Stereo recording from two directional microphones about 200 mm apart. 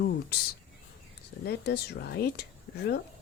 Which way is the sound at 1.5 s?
55° left (ahead or behind).